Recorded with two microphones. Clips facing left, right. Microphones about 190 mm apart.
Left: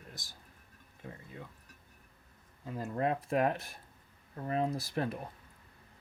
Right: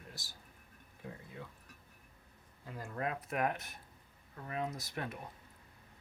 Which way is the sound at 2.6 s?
25° left (ahead or behind).